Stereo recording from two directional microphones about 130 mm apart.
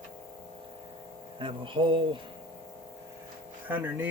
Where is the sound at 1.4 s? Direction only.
40° right (ahead or behind).